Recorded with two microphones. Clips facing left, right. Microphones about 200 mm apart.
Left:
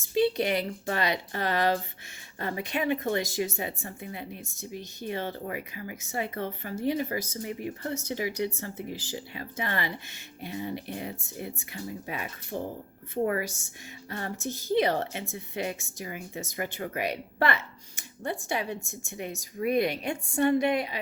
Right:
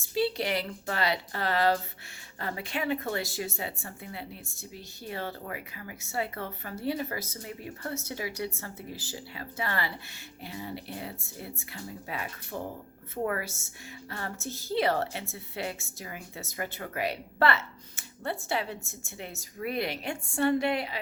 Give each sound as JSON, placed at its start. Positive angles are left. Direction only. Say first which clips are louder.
{"t": 0.1, "sound": "a woman's voice", "louder": "left 4 dB", "side_deg": 20}